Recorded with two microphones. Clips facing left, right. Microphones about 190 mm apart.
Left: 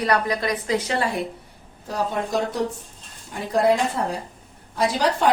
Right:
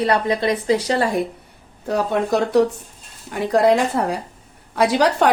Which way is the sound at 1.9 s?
65° right (ahead or behind).